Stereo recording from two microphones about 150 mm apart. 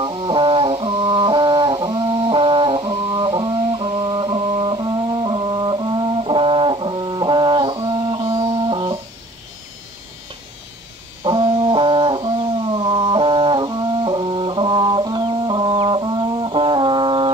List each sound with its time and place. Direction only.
0.0 s brass instrument: 35° right (ahead or behind)
11.2 s brass instrument: 35° right (ahead or behind)